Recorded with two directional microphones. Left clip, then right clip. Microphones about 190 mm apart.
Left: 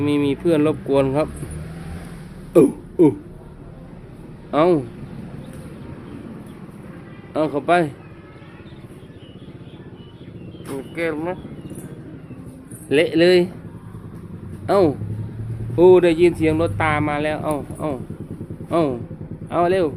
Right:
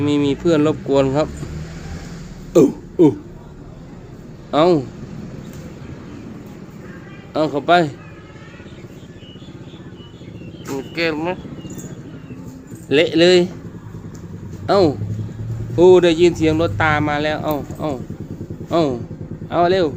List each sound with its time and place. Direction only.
0.0 s speech: centre (ahead or behind)
2.5 s speech: centre (ahead or behind)
4.5 s speech: centre (ahead or behind)
7.3 s speech: centre (ahead or behind)
10.8 s vehicle: 20° right (ahead or behind)
12.9 s speech: centre (ahead or behind)
14.7 s speech: centre (ahead or behind)